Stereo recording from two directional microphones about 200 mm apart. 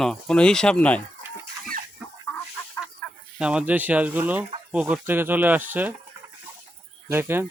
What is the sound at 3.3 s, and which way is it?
Speech, 5° right (ahead or behind).